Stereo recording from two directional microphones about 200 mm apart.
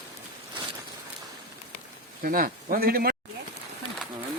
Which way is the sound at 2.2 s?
45° right (ahead or behind).